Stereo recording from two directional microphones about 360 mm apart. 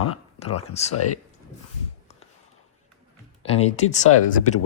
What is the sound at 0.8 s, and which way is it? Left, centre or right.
Speech, centre.